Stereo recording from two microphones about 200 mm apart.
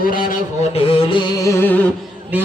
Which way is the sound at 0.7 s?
25° left (ahead or behind).